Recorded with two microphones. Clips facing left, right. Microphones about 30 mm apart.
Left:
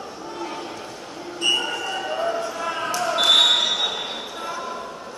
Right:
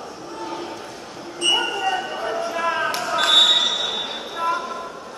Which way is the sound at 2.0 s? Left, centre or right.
Centre.